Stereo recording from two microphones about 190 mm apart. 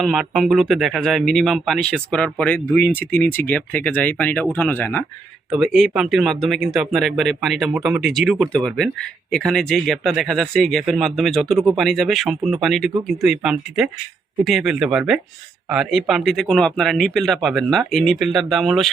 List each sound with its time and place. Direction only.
0.0 s speech: centre (ahead or behind)
5.5 s speech: centre (ahead or behind)